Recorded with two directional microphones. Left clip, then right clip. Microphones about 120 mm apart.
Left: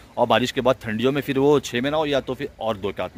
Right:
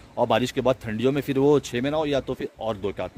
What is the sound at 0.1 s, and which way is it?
Speech, centre (ahead or behind).